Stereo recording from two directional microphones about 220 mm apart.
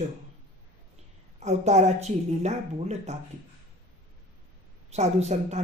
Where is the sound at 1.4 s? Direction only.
30° right (ahead or behind).